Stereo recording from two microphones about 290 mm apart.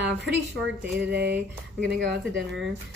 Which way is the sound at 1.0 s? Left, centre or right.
Right.